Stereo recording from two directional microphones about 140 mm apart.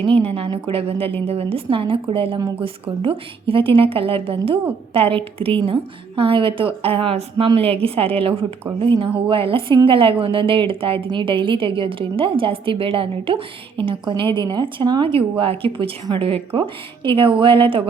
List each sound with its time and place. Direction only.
0.0 s a woman's voice: 40° right (ahead or behind)